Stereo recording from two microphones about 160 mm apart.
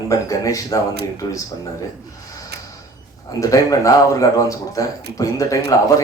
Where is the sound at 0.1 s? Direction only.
20° left (ahead or behind).